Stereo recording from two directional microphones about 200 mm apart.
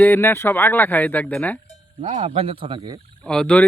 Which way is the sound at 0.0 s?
10° left (ahead or behind).